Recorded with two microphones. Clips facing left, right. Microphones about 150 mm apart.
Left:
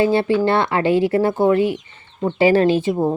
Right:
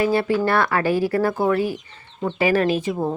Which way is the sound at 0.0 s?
25° left (ahead or behind).